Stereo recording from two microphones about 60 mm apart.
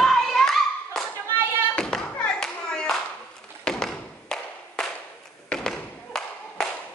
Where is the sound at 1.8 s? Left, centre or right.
Centre.